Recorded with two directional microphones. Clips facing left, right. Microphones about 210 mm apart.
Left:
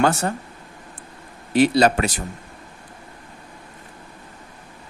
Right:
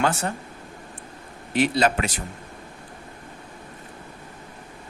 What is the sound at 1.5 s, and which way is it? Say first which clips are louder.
Speech: left 5 dB; 35° left (ahead or behind).